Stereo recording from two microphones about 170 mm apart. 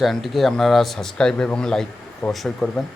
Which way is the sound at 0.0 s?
Centre (ahead or behind).